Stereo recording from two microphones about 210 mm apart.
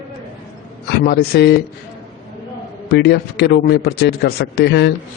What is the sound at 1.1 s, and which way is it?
Speech, 55° left (ahead or behind).